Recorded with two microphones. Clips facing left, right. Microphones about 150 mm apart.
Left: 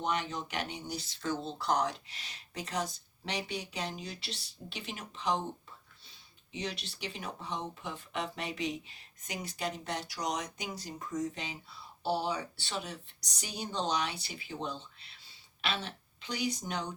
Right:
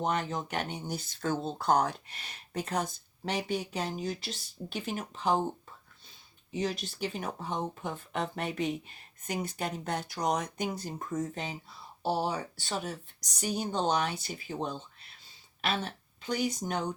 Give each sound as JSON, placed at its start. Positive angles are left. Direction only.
{"t": 0.0, "sound": "speech", "side_deg": -45}
{"t": 6.5, "sound": "speech", "side_deg": -45}